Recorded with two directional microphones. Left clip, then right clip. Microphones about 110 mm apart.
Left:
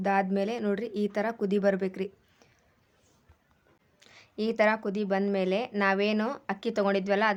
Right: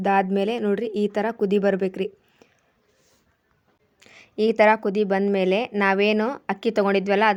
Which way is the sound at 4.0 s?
45° right (ahead or behind).